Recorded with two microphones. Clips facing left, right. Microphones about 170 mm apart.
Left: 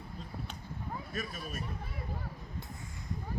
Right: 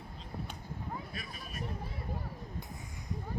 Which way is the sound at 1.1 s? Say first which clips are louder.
Left 5 dB; 45° left (ahead or behind).